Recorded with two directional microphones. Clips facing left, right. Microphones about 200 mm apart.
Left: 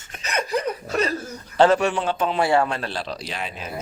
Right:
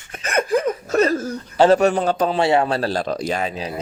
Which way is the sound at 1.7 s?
40° right (ahead or behind).